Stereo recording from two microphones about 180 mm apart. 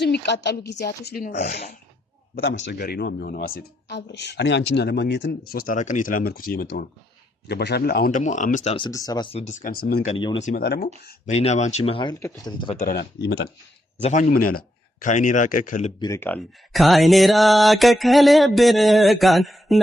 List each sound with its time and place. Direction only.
0.0 s a woman's voice: 70° left (ahead or behind)
1.3 s speech: 40° left (ahead or behind)
2.3 s speech: 60° left (ahead or behind)
8.2 s speech: 45° left (ahead or behind)
8.7 s speech: 20° left (ahead or behind)
9.4 s speech: 40° left (ahead or behind)
10.4 s speech: 60° left (ahead or behind)
11.3 s speech: 35° left (ahead or behind)
12.7 s speech: 50° left (ahead or behind)
13.0 s a woman's voice: 65° left (ahead or behind)
14.0 s speech: 40° left (ahead or behind)
16.0 s speech: 20° left (ahead or behind)
16.7 s mantra: centre (ahead or behind)